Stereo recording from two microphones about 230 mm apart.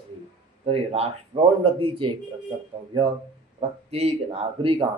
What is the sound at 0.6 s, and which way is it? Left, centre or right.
Speech, right.